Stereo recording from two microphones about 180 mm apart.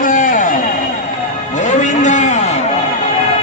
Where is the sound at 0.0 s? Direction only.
45° left (ahead or behind).